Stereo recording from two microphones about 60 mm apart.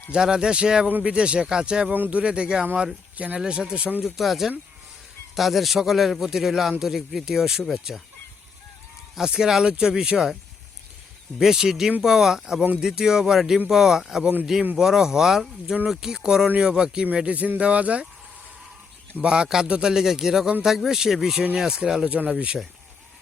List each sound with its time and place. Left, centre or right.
0.1 s a man's voice: centre
0.9 s speech: right
1.1 s a man's voice: centre
1.9 s a man's voice: right
4.0 s a man's voice: centre
9.1 s a man's voice: centre
11.3 s a man's voice: centre
19.2 s a man's voice: centre